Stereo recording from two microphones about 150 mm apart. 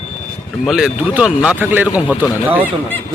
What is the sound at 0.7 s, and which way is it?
Speech, 5° right (ahead or behind).